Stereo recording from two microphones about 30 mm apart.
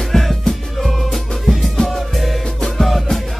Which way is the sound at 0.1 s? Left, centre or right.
Centre.